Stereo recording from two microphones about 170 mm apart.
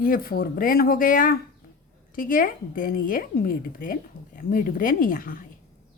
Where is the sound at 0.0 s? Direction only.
60° left (ahead or behind).